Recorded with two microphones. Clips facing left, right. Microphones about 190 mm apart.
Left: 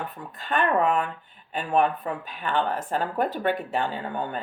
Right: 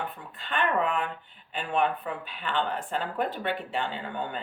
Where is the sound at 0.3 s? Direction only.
40° left (ahead or behind).